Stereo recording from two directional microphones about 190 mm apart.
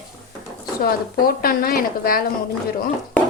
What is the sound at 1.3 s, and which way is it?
Speech, 50° left (ahead or behind).